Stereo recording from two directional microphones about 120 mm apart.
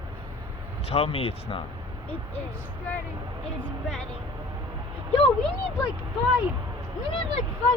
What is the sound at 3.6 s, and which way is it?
Speech, 5° left (ahead or behind).